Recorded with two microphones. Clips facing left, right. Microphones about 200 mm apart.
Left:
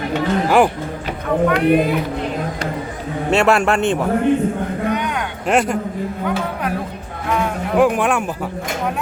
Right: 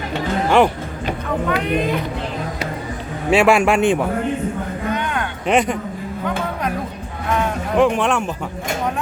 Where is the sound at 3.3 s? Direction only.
5° right (ahead or behind).